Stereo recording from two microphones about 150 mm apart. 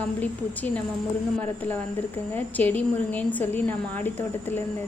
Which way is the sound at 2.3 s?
10° left (ahead or behind).